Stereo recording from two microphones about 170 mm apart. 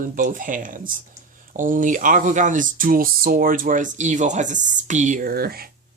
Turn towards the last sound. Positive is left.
turn(degrees=-60)  # may be behind; listen again after turning